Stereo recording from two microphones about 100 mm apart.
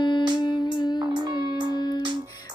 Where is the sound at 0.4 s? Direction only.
50° left (ahead or behind).